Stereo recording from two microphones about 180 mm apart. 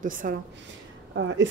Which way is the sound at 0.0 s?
50° right (ahead or behind).